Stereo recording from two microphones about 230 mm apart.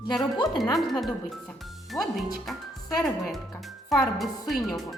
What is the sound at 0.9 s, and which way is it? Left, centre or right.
Speech, centre.